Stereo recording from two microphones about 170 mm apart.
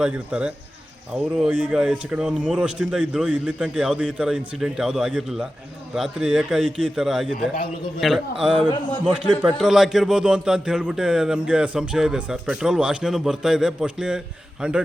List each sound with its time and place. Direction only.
0.0 s a man's voice: 5° right (ahead or behind)
8.6 s a man's voice: 30° left (ahead or behind)
9.4 s speech: 5° right (ahead or behind)